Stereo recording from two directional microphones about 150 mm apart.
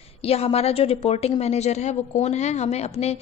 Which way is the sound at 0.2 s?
40° left (ahead or behind).